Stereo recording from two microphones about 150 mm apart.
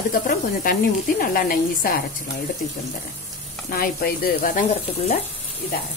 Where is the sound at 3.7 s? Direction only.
80° left.